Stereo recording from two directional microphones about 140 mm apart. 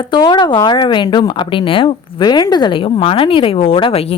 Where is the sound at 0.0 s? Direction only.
35° left (ahead or behind).